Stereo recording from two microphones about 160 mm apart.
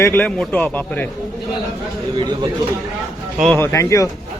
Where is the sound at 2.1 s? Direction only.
30° right (ahead or behind).